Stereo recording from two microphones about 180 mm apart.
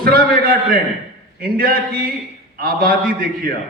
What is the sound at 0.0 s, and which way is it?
A man's voice, 55° right (ahead or behind).